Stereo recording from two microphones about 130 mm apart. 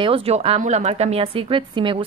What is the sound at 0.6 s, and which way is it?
Speech, 60° right (ahead or behind).